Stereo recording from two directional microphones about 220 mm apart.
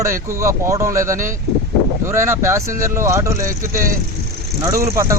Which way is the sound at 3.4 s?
40° right (ahead or behind).